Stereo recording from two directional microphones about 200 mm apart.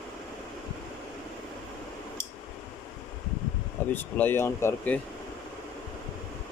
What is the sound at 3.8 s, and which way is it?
Air conditioning, 10° left (ahead or behind).